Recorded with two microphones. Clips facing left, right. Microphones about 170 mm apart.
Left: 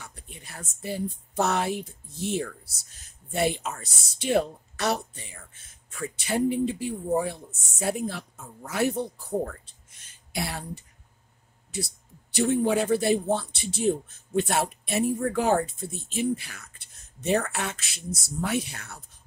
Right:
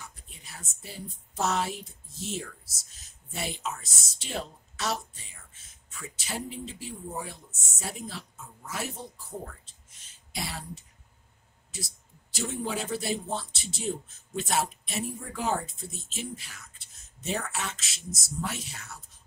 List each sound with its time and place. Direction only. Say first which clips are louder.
0.0 s speech: left 4 dB; 60° left (ahead or behind)